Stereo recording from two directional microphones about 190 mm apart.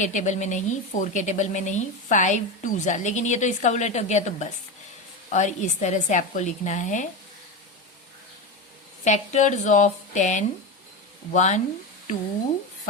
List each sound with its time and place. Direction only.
0.0 s a woman's voice: 40° left (ahead or behind)
9.0 s a woman's voice: 40° left (ahead or behind)